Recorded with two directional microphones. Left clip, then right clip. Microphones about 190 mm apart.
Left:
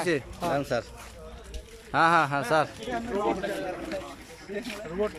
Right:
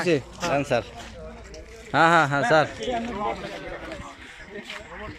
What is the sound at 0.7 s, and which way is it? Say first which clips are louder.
Speech: right 5 dB; 10° left (ahead or behind).